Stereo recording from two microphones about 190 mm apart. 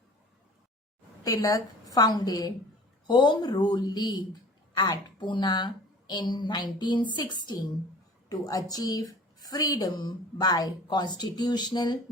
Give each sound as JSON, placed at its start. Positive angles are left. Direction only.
{"t": 1.2, "sound": "speech", "side_deg": 20}